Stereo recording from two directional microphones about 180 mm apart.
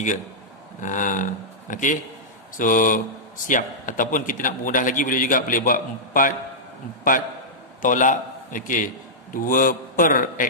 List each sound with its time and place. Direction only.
0.7 s a man's voice: 45° left (ahead or behind)
7.8 s a man's voice: 45° left (ahead or behind)